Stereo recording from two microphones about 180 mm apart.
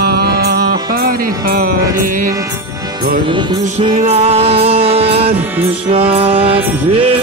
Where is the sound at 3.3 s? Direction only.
25° right (ahead or behind).